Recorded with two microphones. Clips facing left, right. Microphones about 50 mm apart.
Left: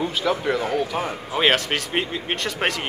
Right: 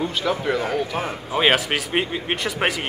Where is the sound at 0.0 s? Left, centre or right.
Centre.